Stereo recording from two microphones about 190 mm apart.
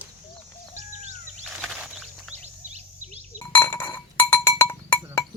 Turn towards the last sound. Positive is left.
turn(degrees=10)  # may be behind; listen again after turning